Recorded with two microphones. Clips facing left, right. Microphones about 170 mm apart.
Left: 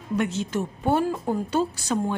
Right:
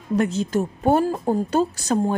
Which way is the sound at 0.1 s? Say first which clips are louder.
Right 4 dB; 40° right (ahead or behind).